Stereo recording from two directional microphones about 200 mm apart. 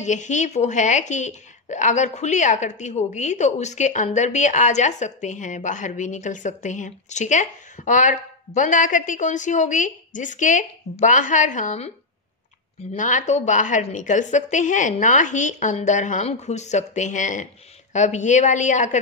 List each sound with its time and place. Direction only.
0.0 s a woman's voice: 35° left (ahead or behind)
12.9 s a woman's voice: 40° left (ahead or behind)